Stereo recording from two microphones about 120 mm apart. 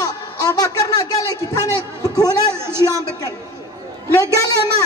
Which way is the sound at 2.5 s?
20° right (ahead or behind).